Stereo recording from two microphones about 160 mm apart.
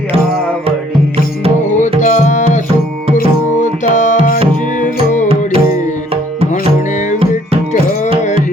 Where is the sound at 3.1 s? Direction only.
50° left (ahead or behind).